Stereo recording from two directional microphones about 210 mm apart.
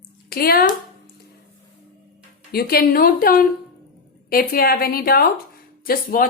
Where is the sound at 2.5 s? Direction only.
45° left (ahead or behind).